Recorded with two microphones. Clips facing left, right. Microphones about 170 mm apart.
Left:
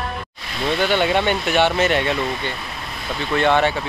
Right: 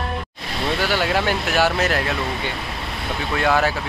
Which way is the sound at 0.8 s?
5° right (ahead or behind).